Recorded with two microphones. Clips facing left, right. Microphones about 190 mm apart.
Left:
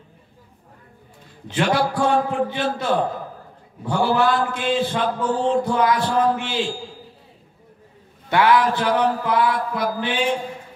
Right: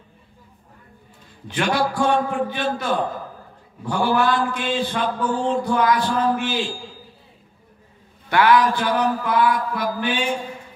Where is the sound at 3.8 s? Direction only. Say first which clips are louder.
Left 1 dB; 25° left (ahead or behind).